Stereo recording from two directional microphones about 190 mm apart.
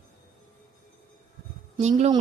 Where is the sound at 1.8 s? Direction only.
35° right (ahead or behind).